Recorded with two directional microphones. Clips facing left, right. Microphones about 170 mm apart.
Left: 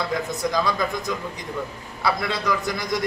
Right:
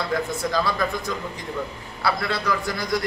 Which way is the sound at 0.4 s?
20° left (ahead or behind).